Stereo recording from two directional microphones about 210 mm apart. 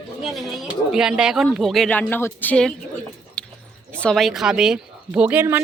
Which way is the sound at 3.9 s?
5° left (ahead or behind).